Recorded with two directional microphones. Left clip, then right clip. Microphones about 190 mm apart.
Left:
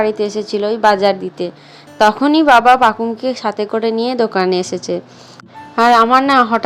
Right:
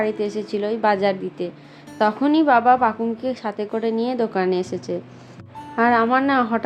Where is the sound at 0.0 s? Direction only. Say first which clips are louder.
Left 7 dB; 15° left (ahead or behind).